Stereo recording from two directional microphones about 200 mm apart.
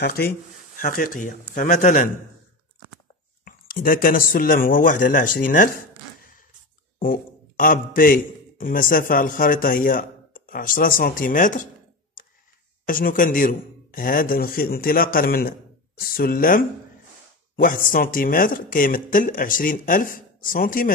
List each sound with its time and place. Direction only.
0.0 s a man's voice: 50° left (ahead or behind)
3.4 s speech: 45° left (ahead or behind)
12.8 s speech: 45° left (ahead or behind)